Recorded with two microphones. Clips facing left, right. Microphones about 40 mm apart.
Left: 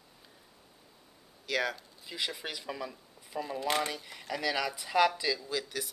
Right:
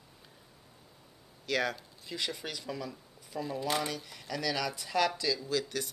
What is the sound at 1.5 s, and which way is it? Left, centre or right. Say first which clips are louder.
Speech: even; centre.